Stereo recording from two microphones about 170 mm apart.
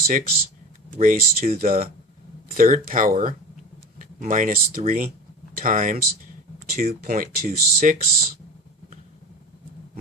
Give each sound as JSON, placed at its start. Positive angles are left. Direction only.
{"t": 0.1, "sound": "speech", "side_deg": -55}